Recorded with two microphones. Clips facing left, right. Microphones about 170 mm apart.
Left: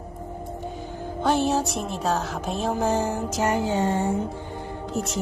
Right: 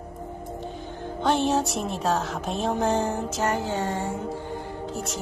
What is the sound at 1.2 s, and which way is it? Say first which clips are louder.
Music: left 1 dB; 5° left (ahead or behind).